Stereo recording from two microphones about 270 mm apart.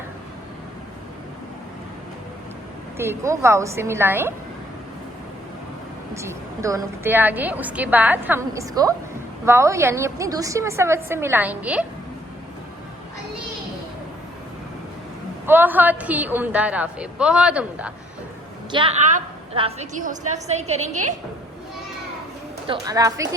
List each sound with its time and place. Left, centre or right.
3.0 s a woman's voice: centre
6.1 s a woman's voice: centre
15.4 s a woman's voice: centre
18.7 s a woman's voice: centre
22.6 s a woman's voice: centre